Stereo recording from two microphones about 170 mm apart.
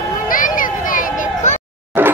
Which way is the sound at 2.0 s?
10° right (ahead or behind).